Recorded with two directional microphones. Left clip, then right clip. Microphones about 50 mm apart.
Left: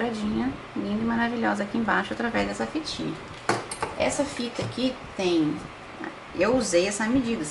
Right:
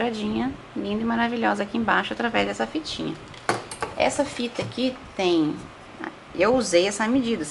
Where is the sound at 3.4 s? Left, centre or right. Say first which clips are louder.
Right 1 dB; centre.